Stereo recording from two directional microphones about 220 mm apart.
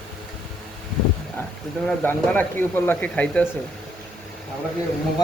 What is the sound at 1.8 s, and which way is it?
Speech, 5° left (ahead or behind).